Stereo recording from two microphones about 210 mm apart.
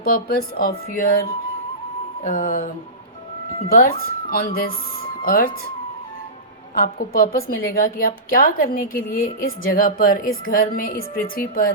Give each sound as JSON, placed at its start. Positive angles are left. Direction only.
{"t": 0.0, "sound": "a woman's voice", "side_deg": 45}
{"t": 3.7, "sound": "a woman's voice", "side_deg": 45}
{"t": 6.7, "sound": "a woman's voice", "side_deg": 45}